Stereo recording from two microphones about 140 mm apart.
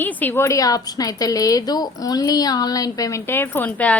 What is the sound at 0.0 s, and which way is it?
A woman's voice, 10° left (ahead or behind).